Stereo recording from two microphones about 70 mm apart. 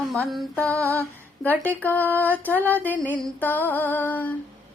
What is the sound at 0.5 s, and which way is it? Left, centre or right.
Female singing, centre.